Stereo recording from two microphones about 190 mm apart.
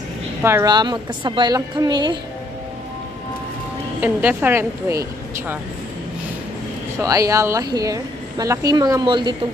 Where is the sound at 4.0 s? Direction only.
10° right (ahead or behind).